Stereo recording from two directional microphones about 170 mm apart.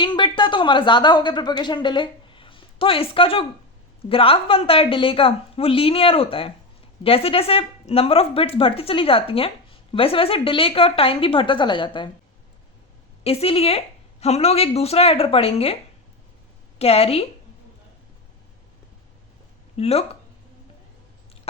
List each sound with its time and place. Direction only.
0.0 s speech: 25° left (ahead or behind)
13.2 s speech: 35° left (ahead or behind)
19.7 s speech: 35° left (ahead or behind)